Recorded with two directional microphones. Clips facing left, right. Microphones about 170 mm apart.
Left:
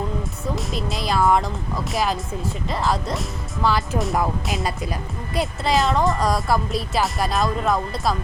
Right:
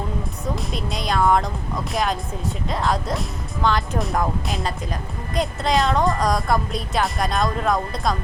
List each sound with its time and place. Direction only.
0.5 s speech: centre (ahead or behind)